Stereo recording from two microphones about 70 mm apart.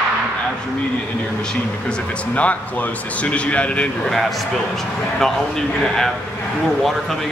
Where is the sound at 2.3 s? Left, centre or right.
Left.